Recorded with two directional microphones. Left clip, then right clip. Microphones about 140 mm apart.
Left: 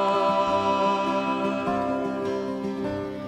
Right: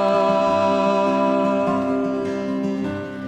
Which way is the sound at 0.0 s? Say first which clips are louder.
Right 4 dB; 60° right (ahead or behind).